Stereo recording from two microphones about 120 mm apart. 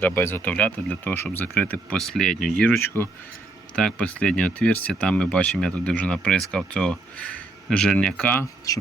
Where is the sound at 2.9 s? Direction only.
15° left (ahead or behind).